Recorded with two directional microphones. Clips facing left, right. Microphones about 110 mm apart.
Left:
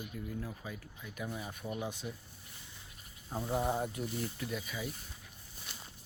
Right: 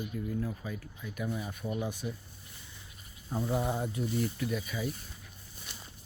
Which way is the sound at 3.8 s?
50° left (ahead or behind).